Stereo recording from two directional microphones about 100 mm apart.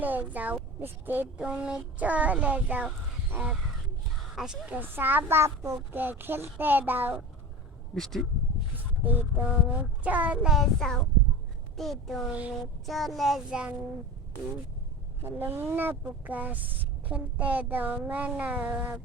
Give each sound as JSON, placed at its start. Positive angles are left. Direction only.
{"t": 0.0, "sound": "speech", "side_deg": -15}
{"t": 4.8, "sound": "a woman's voice", "side_deg": -20}
{"t": 7.9, "sound": "a child's voice", "side_deg": 5}
{"t": 8.7, "sound": "a child's voice", "side_deg": -20}
{"t": 12.3, "sound": "speech", "side_deg": -10}
{"t": 12.8, "sound": "a child's voice", "side_deg": 0}
{"t": 15.2, "sound": "a woman's voice", "side_deg": -20}